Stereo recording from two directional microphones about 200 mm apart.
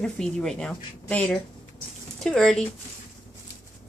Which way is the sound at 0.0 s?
5° left (ahead or behind).